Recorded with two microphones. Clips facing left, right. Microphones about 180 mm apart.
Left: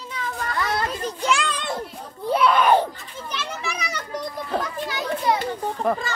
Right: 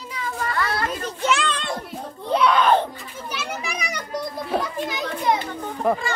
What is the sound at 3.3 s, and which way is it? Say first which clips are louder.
Children playing: even; 10° right (ahead or behind).